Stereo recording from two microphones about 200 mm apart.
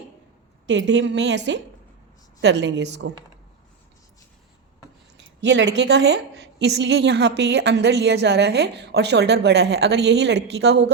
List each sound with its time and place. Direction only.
0.7 s a woman's voice: 60° right (ahead or behind)
5.1 s a woman's voice: 60° right (ahead or behind)